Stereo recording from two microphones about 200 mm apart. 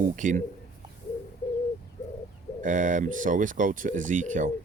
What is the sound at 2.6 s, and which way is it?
Speech, 40° right (ahead or behind).